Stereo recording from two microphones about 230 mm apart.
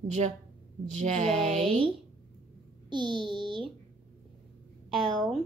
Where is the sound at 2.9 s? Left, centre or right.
Right.